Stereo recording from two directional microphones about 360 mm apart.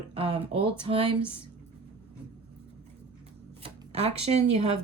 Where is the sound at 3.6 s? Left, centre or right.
Centre.